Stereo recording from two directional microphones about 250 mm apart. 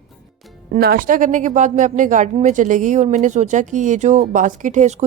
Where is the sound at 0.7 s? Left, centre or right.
Right.